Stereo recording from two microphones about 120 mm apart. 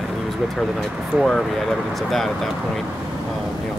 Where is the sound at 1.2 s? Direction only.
Centre (ahead or behind).